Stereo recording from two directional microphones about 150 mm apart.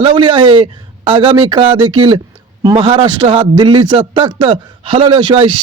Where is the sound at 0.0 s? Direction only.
30° right (ahead or behind).